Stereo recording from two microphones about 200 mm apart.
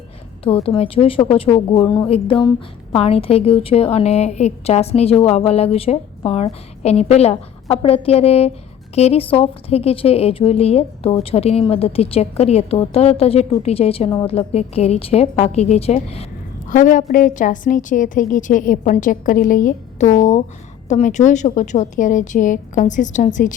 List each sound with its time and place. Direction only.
0.4 s a woman's voice: 30° left (ahead or behind)
16.6 s a woman's voice: 40° left (ahead or behind)